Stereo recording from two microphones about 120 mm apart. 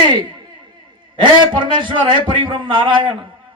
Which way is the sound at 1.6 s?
40° right (ahead or behind).